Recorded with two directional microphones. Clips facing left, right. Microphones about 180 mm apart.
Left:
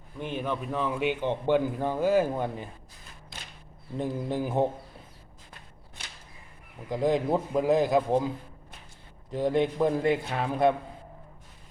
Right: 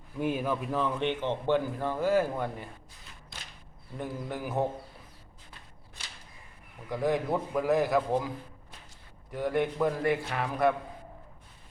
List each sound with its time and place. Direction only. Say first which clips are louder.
0.2 s a man's voice: right 2 dB; 5° right (ahead or behind); by 2.6 s 20° left (ahead or behind)
3.9 s a man's voice: left 6 dB; 25° left (ahead or behind)
6.9 s a man's voice: left 3 dB; 20° left (ahead or behind)
9.3 s a man's voice: left 3 dB; 25° left (ahead or behind)